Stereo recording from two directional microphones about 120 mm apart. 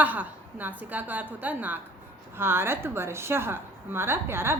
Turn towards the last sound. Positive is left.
turn(degrees=-20)  # may be behind; listen again after turning